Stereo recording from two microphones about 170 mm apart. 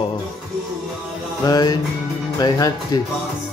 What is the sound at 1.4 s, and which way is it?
Speech, 25° left (ahead or behind).